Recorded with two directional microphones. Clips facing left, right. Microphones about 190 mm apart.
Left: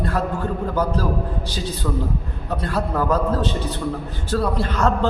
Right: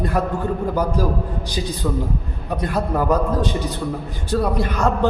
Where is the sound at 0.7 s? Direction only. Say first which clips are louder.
Even; 15° right (ahead or behind).